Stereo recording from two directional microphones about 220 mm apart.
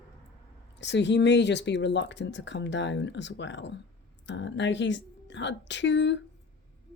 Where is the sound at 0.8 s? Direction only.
55° left (ahead or behind).